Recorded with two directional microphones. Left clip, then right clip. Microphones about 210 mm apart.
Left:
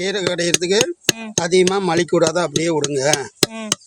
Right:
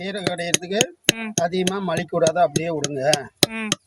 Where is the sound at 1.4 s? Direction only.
50° left (ahead or behind).